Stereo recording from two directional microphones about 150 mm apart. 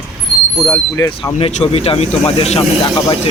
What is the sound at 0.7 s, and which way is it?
Speech, 15° left (ahead or behind).